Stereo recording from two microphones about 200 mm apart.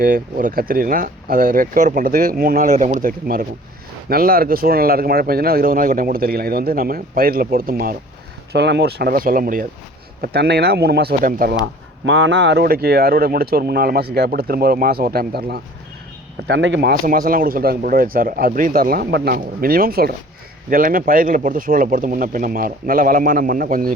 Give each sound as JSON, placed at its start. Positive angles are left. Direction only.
{"t": 0.0, "sound": "speech", "side_deg": -45}
{"t": 8.5, "sound": "speech", "side_deg": -60}
{"t": 11.6, "sound": "speech", "side_deg": -70}
{"t": 16.5, "sound": "a man's voice", "side_deg": -65}
{"t": 16.9, "sound": "speech", "side_deg": -45}